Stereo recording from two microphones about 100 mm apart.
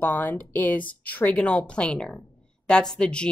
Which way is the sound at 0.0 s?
20° left (ahead or behind).